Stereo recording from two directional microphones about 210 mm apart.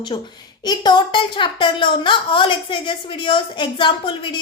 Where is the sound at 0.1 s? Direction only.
25° left (ahead or behind).